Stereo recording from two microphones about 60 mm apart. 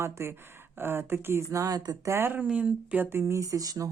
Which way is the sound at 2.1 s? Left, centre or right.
Right.